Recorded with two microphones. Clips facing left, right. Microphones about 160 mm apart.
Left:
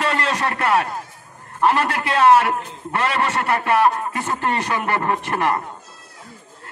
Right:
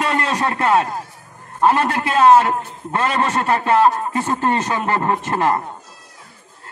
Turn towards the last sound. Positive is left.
turn(degrees=-25)  # may be behind; listen again after turning